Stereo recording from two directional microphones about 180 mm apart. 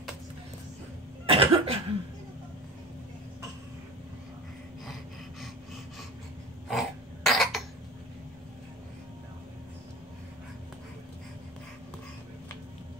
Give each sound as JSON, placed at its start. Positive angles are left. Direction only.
{"t": 1.2, "sound": "cough", "side_deg": -30}
{"t": 6.7, "sound": "cough", "side_deg": 0}